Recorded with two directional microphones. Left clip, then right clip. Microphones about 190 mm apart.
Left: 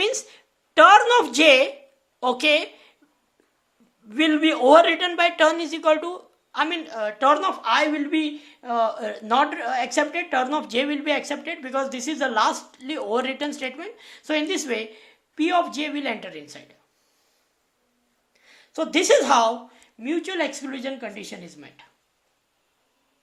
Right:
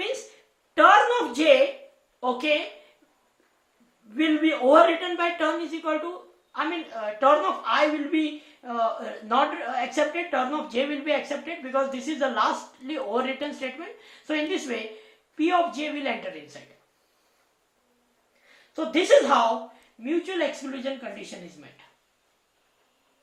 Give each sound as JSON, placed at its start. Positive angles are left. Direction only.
{"t": 0.7, "sound": "a woman's voice", "side_deg": 55}
{"t": 4.1, "sound": "a man's voice", "side_deg": 50}
{"t": 6.5, "sound": "a woman's voice", "side_deg": 45}
{"t": 18.4, "sound": "a sound", "side_deg": 45}
{"t": 20.0, "sound": "speech", "side_deg": 30}